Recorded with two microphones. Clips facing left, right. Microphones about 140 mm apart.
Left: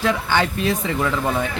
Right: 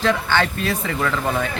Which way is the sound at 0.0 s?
15° left (ahead or behind).